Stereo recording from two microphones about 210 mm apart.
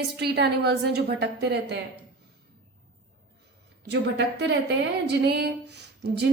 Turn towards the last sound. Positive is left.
turn(degrees=-55)  # may be behind; listen again after turning